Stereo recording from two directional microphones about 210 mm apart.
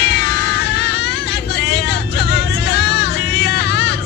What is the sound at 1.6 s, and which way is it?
Vehicle, 55° left (ahead or behind).